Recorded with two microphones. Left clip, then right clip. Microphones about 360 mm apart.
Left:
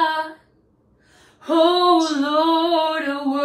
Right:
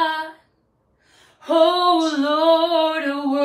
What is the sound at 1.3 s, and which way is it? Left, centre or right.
Female singing, centre.